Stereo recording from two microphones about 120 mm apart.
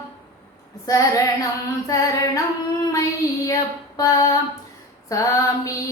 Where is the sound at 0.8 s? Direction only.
25° left (ahead or behind).